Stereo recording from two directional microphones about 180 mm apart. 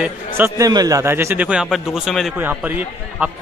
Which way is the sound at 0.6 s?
20° right (ahead or behind).